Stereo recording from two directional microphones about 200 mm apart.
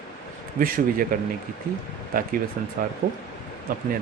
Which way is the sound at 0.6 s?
45° right (ahead or behind).